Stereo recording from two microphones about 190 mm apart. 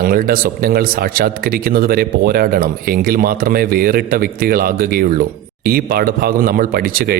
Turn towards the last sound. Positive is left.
turn(degrees=-50)  # may be behind; listen again after turning